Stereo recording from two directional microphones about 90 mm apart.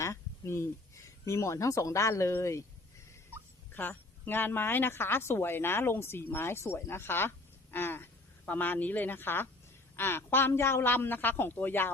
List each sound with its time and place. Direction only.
0.0 s speech: 30° left (ahead or behind)
3.8 s a woman's voice: 20° left (ahead or behind)